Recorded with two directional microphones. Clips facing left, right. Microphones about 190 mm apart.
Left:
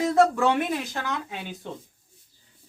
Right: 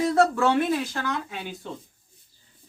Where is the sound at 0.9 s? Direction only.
20° left (ahead or behind).